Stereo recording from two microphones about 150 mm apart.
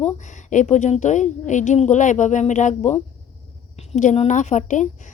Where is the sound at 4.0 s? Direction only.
55° left (ahead or behind).